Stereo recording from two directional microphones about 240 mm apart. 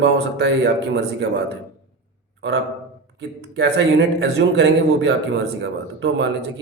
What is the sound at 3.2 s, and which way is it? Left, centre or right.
Speech, right.